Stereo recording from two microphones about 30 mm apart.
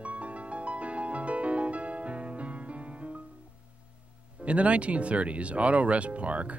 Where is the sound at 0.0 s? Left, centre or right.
Right.